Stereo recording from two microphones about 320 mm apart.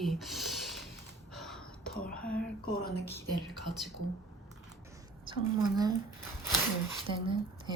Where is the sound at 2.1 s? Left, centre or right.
Centre.